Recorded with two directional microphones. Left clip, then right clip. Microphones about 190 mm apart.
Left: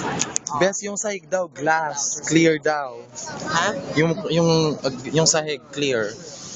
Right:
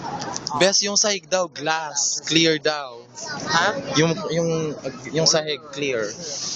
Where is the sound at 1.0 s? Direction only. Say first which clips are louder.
Right 3 dB; 5° right (ahead or behind).